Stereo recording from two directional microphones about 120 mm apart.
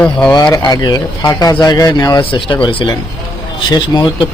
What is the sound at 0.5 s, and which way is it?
Speech, 30° left (ahead or behind).